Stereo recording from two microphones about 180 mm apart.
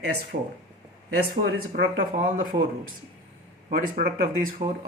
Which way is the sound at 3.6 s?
50° right (ahead or behind).